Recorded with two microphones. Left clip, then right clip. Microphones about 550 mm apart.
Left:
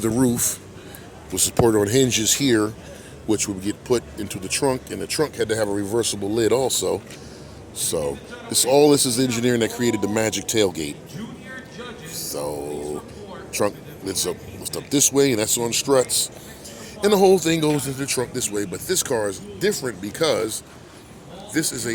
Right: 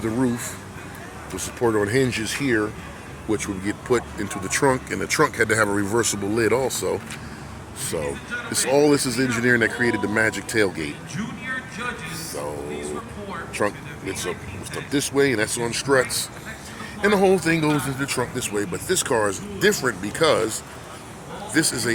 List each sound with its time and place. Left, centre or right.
0.0 s a man's voice: left
13.5 s a man's voice: left
21.5 s speech: left